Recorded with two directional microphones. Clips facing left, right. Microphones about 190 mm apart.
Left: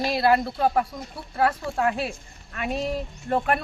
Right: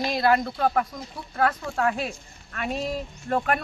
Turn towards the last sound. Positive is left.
turn(degrees=0)  # may be behind; listen again after turning